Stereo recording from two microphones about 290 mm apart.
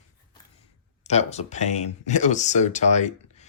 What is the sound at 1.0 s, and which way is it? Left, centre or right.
Speech, left.